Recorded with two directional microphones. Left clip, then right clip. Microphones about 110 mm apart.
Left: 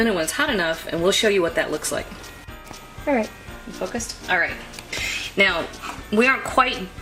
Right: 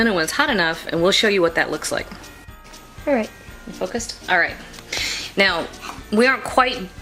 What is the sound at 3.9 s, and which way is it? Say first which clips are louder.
Speech: right 3 dB; 40° right (ahead or behind).